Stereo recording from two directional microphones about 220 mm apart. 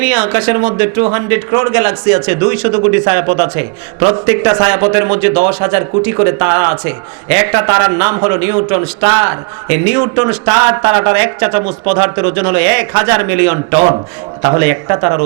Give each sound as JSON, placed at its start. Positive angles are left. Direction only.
{"t": 0.0, "sound": "a man's voice", "side_deg": -15}
{"t": 13.7, "sound": "a man's voice", "side_deg": -25}